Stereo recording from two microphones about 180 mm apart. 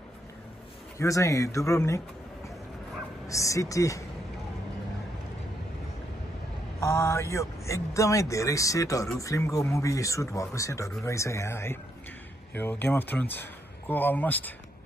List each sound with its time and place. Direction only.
0.9 s a man's voice: 15° left (ahead or behind)
3.3 s a man's voice: 15° left (ahead or behind)
6.8 s a man's voice: 15° left (ahead or behind)